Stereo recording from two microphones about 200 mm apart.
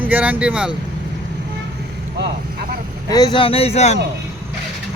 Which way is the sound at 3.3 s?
25° left (ahead or behind).